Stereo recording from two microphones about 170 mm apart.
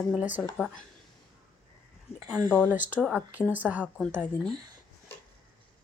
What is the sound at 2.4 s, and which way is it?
Speech, 15° right (ahead or behind).